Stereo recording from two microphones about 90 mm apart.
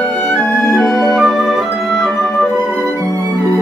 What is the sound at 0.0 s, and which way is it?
Music, 5° left (ahead or behind).